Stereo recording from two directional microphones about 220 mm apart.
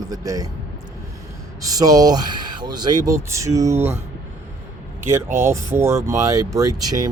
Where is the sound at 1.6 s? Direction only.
15° right (ahead or behind).